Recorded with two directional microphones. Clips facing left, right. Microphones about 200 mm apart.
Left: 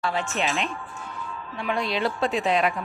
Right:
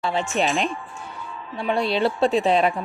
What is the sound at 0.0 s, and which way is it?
Speech, 25° right (ahead or behind).